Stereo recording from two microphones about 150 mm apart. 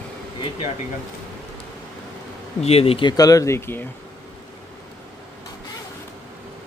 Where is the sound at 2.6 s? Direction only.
40° left (ahead or behind); by 3.8 s 15° left (ahead or behind).